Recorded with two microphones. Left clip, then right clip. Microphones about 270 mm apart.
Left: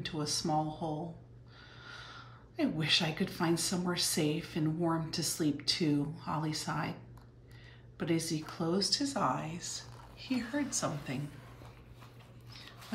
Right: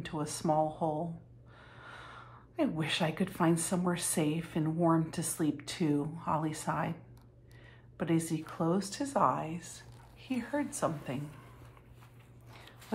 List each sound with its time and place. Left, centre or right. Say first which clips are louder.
0.0 s speech: even; centre
8.0 s speech: right 1 dB; centre